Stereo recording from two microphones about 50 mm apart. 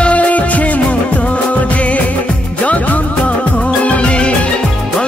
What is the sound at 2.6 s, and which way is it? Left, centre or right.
Music, left.